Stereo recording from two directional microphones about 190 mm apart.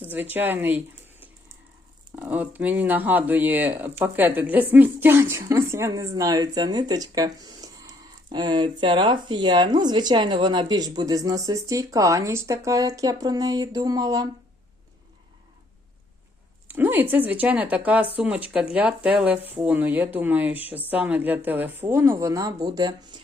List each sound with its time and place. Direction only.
0.0 s speech: 10° right (ahead or behind)
2.1 s speech: 10° right (ahead or behind)
16.6 s speech: 10° right (ahead or behind)